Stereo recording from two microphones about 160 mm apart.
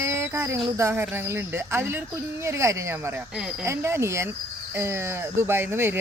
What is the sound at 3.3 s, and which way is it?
Speech, 5° right (ahead or behind).